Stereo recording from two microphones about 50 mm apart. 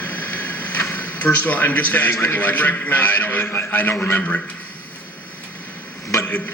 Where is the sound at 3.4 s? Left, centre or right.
Left.